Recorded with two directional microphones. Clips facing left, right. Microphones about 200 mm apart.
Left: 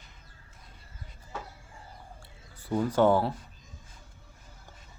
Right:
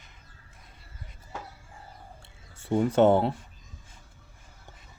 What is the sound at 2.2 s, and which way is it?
Speech, 25° right (ahead or behind).